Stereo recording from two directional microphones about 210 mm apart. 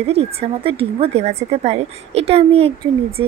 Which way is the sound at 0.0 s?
30° right (ahead or behind).